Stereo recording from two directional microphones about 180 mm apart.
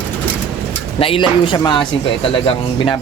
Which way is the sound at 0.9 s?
30° left (ahead or behind).